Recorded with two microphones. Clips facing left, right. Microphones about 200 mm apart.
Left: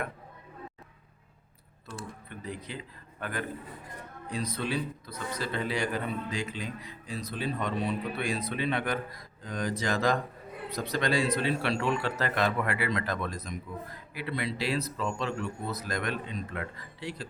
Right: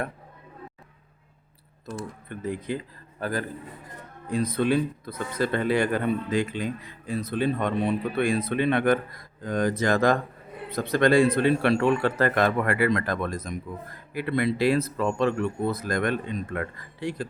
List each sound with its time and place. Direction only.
2.4 s a man's voice: 50° right (ahead or behind)
4.3 s a man's voice: 50° right (ahead or behind)